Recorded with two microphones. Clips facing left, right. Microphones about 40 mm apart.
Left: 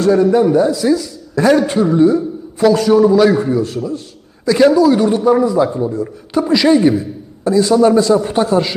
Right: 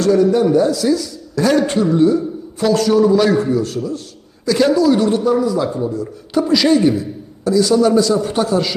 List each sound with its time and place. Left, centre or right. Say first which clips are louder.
0.0 s a man's voice: left 2 dB; centre
5.3 s a man's voice: left 4 dB; left